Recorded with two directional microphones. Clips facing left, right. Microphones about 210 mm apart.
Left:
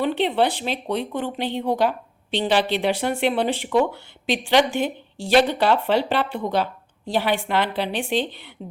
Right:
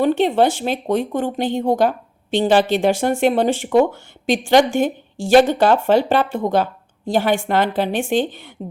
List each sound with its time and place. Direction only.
0.0 s speech: 45° right (ahead or behind)